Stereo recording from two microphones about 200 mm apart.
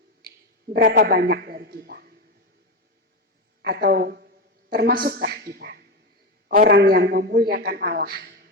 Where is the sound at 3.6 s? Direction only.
50° right (ahead or behind).